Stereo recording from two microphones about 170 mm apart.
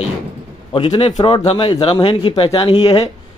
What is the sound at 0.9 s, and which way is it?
Speech, 25° left (ahead or behind).